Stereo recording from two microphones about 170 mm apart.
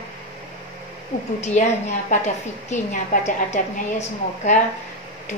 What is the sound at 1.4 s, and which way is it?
A woman's voice, 40° left (ahead or behind).